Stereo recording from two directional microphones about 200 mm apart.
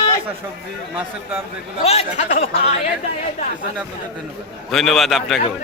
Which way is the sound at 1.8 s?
30° left (ahead or behind).